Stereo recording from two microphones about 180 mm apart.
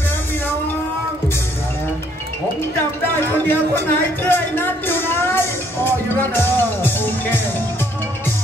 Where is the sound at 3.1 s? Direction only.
10° left (ahead or behind).